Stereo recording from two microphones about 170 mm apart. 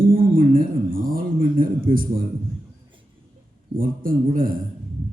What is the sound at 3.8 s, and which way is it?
Speech, 55° right (ahead or behind).